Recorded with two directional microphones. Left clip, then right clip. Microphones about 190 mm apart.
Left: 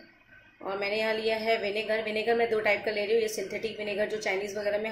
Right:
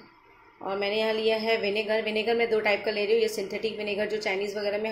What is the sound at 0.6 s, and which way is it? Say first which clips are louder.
A woman's voice: right 2 dB; 15° right (ahead or behind).